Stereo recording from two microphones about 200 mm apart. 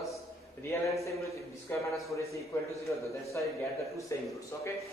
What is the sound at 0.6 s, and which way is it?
A man's voice, 15° left (ahead or behind).